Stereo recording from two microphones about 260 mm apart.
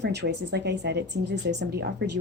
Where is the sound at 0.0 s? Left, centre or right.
Right.